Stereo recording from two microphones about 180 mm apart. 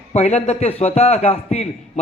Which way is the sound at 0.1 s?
35° left (ahead or behind).